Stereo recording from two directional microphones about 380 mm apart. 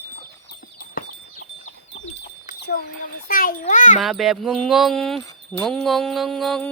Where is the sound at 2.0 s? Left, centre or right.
Left.